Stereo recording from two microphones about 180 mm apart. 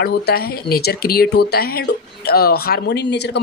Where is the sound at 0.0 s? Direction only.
60° left (ahead or behind).